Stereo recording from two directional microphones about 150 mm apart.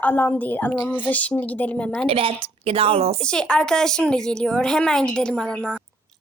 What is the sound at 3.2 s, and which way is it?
A woman's voice, 5° left (ahead or behind).